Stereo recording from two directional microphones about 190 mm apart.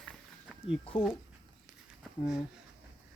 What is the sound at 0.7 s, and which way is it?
Speech, 30° left (ahead or behind).